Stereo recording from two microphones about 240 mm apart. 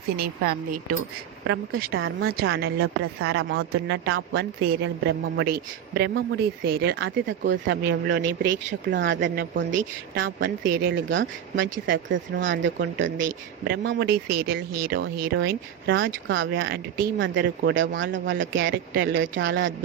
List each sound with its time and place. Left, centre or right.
0.2 s a woman's voice: right
2.0 s speech: right
2.5 s a woman's voice: right
2.8 s a woman's voice: right
10.9 s speech: right
17.3 s a woman's voice: right
17.7 s speech: right